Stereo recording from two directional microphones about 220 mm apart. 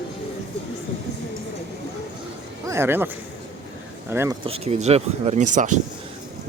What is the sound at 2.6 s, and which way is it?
Speech, 10° right (ahead or behind).